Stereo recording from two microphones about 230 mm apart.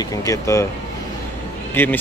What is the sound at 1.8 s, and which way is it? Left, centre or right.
Speech, centre.